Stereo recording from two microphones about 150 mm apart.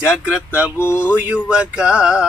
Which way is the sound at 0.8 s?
15° left (ahead or behind).